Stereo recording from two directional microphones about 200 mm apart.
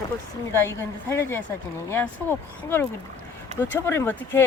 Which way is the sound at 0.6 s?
10° left (ahead or behind).